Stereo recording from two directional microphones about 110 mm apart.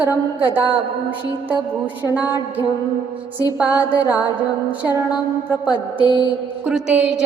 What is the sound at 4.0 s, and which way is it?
Mantra, 30° left (ahead or behind).